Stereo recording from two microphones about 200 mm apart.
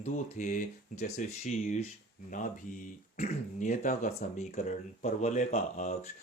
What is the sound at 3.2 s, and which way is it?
Speech, 35° left (ahead or behind).